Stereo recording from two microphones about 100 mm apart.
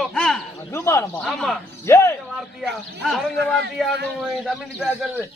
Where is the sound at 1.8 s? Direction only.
25° left (ahead or behind).